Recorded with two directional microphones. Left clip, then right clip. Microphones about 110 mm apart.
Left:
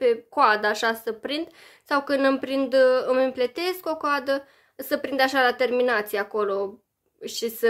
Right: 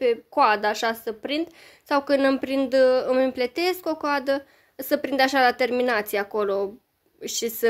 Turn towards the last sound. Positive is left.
turn(degrees=-55)  # may be behind; listen again after turning